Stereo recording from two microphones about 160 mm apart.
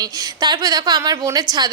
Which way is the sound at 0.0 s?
25° right (ahead or behind).